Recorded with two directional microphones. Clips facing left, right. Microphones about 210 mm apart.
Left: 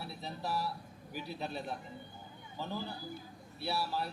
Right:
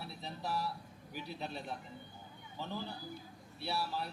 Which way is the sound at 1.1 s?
5° left (ahead or behind).